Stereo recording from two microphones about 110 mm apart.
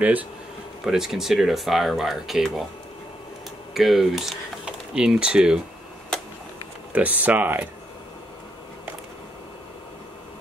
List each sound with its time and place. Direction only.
0.0 s speech: 15° right (ahead or behind)
0.8 s speech: 5° right (ahead or behind)
3.7 s speech: centre (ahead or behind)
6.1 s a sound: 5° left (ahead or behind)
6.9 s speech: 15° right (ahead or behind)